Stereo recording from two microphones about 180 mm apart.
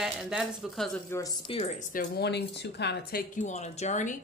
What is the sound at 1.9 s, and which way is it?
Speech, 65° left (ahead or behind).